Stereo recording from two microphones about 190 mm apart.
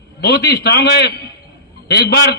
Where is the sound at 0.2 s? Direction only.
55° left (ahead or behind).